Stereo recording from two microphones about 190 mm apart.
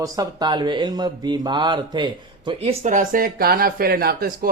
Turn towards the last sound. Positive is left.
turn(degrees=-55)  # may be behind; listen again after turning